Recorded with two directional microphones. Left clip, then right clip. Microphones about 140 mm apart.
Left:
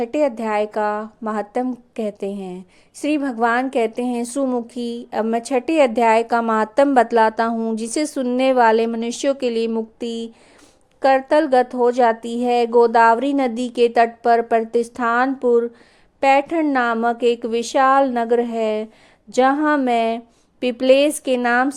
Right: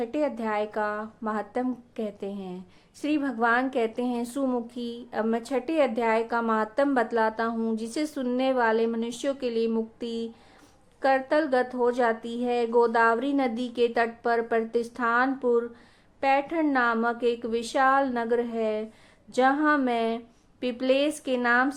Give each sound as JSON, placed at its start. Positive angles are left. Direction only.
{"t": 0.0, "sound": "speech", "side_deg": 55}
{"t": 4.7, "sound": "speech", "side_deg": 55}
{"t": 7.6, "sound": "speech", "side_deg": 50}
{"t": 16.2, "sound": "speech", "side_deg": 65}